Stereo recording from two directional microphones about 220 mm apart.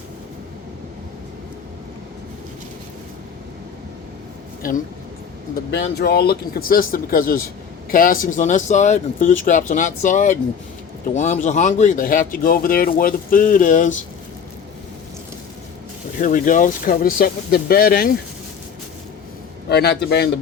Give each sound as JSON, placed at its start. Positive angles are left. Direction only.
{"t": 4.6, "sound": "speech", "side_deg": 40}
{"t": 16.2, "sound": "speech", "side_deg": 35}
{"t": 19.6, "sound": "a man's voice", "side_deg": 50}